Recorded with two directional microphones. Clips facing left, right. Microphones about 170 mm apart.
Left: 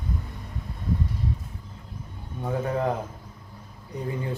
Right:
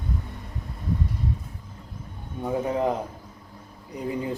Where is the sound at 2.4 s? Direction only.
10° right (ahead or behind).